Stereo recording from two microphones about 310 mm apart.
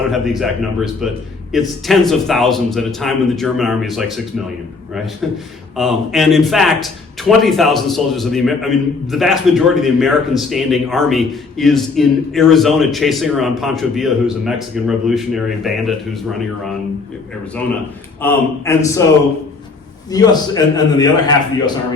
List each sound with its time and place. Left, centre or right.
0.1 s speech: centre
5.2 s speech: centre
18.2 s a man's voice: centre
20.1 s a man's voice: centre